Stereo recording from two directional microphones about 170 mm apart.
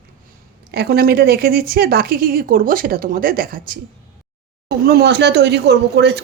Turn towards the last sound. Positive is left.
turn(degrees=-80)